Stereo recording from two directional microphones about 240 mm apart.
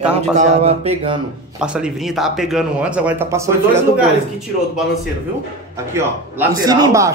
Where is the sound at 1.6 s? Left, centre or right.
Centre.